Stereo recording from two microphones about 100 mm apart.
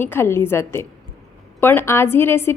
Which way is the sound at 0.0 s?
20° left (ahead or behind).